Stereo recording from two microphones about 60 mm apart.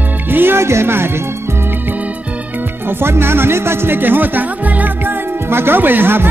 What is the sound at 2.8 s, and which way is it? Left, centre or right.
Speech, right.